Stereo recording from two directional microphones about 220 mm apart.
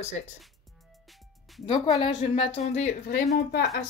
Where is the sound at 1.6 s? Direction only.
20° left (ahead or behind).